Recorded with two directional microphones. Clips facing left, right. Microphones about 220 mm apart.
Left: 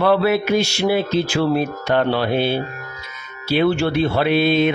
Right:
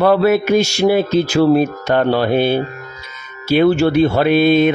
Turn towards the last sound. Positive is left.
turn(degrees=-50)  # may be behind; listen again after turning